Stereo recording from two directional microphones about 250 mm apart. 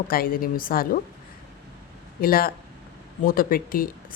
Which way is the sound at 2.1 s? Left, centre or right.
Left.